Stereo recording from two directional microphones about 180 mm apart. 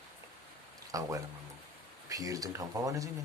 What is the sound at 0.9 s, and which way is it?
Speech, 20° right (ahead or behind).